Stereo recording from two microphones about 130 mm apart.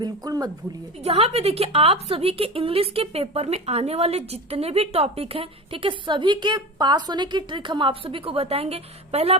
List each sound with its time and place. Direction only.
0.0 s speech: 30° right (ahead or behind)
1.0 s a woman's voice: 50° right (ahead or behind)